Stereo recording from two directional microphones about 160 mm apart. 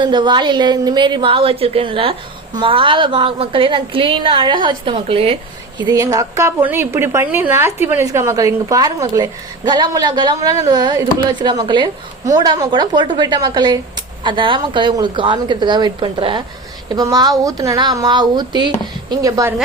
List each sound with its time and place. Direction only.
0.0 s a woman's voice: 30° right (ahead or behind)
5.8 s a woman's voice: 25° right (ahead or behind)